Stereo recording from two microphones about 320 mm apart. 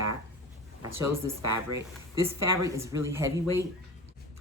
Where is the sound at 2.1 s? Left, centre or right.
Centre.